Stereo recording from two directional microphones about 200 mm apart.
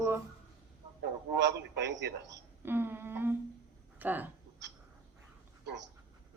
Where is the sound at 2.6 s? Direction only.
10° right (ahead or behind).